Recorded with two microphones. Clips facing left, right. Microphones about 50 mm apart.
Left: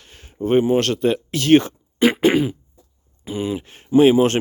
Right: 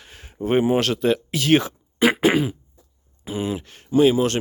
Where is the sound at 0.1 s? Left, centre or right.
Centre.